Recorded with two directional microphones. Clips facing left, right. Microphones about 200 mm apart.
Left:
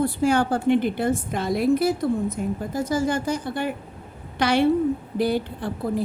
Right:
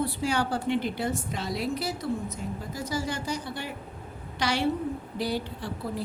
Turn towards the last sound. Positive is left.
turn(degrees=55)  # may be behind; listen again after turning